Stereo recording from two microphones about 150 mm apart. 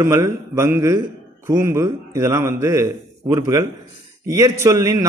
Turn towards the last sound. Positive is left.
turn(degrees=-20)  # may be behind; listen again after turning